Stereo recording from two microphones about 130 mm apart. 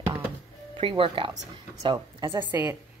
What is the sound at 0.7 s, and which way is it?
A woman's voice, 45° right (ahead or behind).